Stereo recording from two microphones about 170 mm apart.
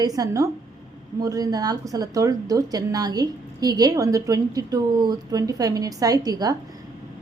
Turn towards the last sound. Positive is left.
turn(degrees=-20)  # may be behind; listen again after turning